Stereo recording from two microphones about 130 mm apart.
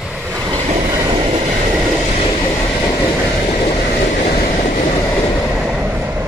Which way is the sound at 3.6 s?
60° left (ahead or behind).